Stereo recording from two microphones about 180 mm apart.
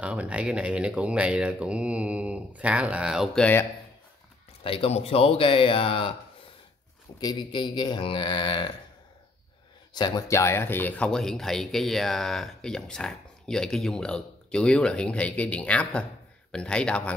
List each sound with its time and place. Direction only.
0.0 s speech: 5° right (ahead or behind)
4.6 s speech: 30° left (ahead or behind)
7.2 s speech: 25° left (ahead or behind)
9.9 s speech: 20° left (ahead or behind); by 17.1 s 5° left (ahead or behind)